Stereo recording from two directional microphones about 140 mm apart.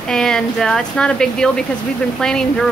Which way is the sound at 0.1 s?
5° left (ahead or behind).